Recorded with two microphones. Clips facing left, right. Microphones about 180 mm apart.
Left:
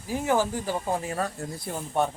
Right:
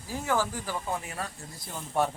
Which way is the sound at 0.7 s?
35° left (ahead or behind).